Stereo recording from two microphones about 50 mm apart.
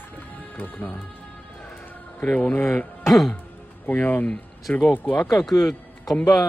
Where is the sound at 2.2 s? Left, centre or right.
Left.